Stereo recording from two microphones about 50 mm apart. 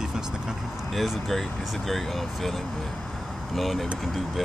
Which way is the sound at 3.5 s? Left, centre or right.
Centre.